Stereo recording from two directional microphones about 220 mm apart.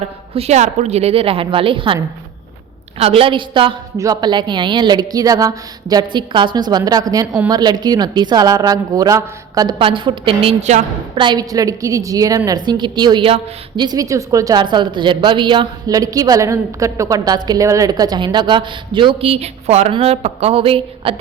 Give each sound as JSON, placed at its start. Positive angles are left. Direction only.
{"t": 0.3, "sound": "a woman's voice", "side_deg": -30}